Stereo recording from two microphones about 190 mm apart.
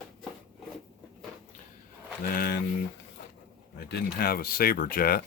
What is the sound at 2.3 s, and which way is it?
Speech, 50° left (ahead or behind).